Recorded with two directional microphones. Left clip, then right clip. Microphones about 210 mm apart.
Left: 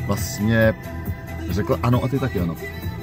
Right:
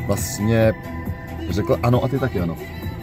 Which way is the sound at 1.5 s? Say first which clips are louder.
Right 2 dB; 15° right (ahead or behind).